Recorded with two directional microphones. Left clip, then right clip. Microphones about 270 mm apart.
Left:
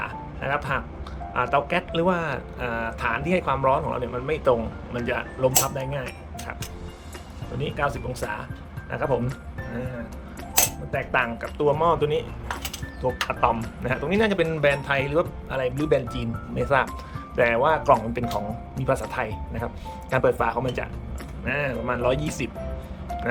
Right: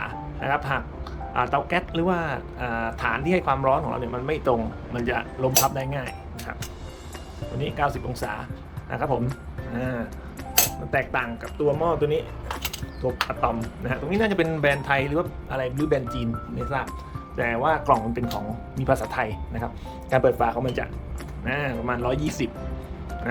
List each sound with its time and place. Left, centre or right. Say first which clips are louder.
0.0 s music: even; centre
1.3 s speech: left 1 dB; centre
7.6 s speech: right 1 dB; centre
10.9 s speech: left 1 dB; centre